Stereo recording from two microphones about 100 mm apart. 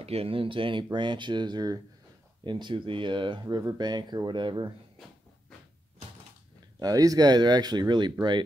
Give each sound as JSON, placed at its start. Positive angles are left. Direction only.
{"t": 0.0, "sound": "speech", "side_deg": -85}
{"t": 6.8, "sound": "speech", "side_deg": -35}